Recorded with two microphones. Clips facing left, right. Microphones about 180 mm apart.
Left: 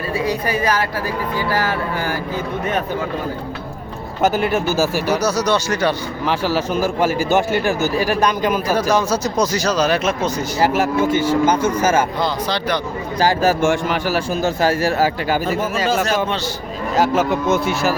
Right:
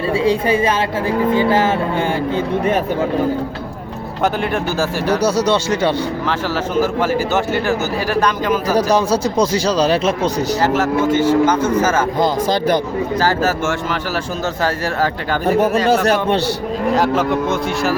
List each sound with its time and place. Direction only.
0.1 s speech: 25° right (ahead or behind)
4.2 s speech: 5° left (ahead or behind)
5.2 s speech: 25° right (ahead or behind)
6.2 s speech: 10° left (ahead or behind)
8.7 s speech: 35° right (ahead or behind)
10.6 s speech: 10° left (ahead or behind)
12.2 s speech: 45° right (ahead or behind)
13.1 s speech: 15° left (ahead or behind)
15.4 s a man's voice: 65° right (ahead or behind)
16.9 s speech: 5° left (ahead or behind)